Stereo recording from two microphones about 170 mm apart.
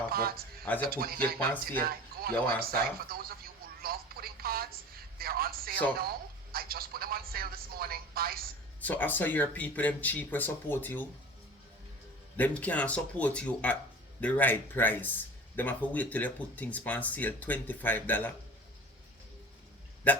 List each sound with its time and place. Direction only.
0.1 s speech: 60° right (ahead or behind)
0.6 s speech: 10° left (ahead or behind)
0.9 s speech: 60° right (ahead or behind)
3.1 s telephone: 60° right (ahead or behind)
6.0 s speech: 60° right (ahead or behind)
8.8 s speech: 10° left (ahead or behind)
12.4 s speech: 10° left (ahead or behind)
20.1 s speech: 10° left (ahead or behind)